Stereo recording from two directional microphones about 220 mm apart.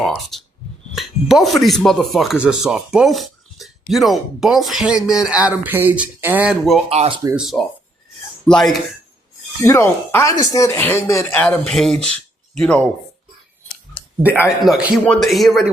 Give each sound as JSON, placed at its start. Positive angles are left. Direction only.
{"t": 0.0, "sound": "speech", "side_deg": 0}
{"t": 6.9, "sound": "speech", "side_deg": -30}
{"t": 7.3, "sound": "speech", "side_deg": 0}
{"t": 14.6, "sound": "speech", "side_deg": -5}